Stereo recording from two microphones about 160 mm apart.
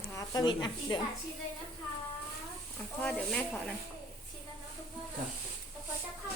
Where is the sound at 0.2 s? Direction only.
25° left (ahead or behind).